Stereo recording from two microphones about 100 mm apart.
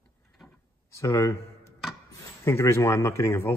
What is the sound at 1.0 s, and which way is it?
Speech, 30° left (ahead or behind).